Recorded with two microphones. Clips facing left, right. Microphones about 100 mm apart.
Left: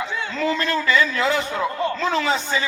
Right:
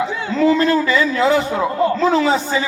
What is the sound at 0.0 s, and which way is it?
A man's voice, 20° right (ahead or behind).